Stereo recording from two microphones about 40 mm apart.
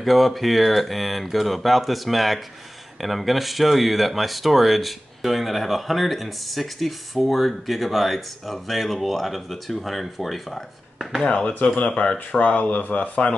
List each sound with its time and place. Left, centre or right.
0.0 s speech: centre
11.2 s speech: left